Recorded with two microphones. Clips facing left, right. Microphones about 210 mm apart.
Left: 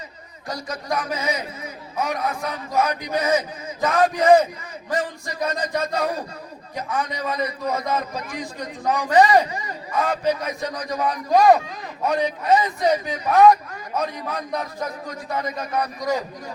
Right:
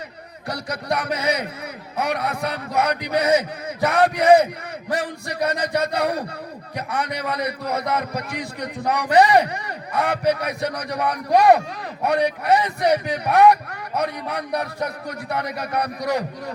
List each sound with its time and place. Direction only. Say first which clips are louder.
0.4 s a man's voice: right 2 dB; 65° right (ahead or behind)